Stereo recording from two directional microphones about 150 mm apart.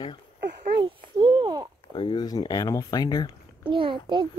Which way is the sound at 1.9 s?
30° left (ahead or behind).